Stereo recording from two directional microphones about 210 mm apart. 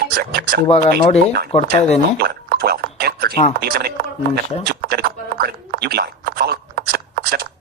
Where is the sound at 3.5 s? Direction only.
45° right (ahead or behind).